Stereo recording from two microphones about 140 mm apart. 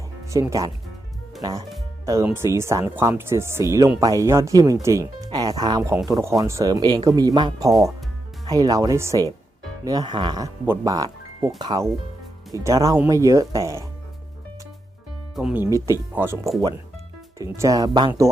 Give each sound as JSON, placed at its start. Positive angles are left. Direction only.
{"t": 0.3, "sound": "speech", "side_deg": -25}
{"t": 15.4, "sound": "speech", "side_deg": -5}
{"t": 15.6, "sound": "speech", "side_deg": -20}